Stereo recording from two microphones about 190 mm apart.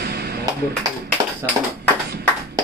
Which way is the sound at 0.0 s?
55° right (ahead or behind).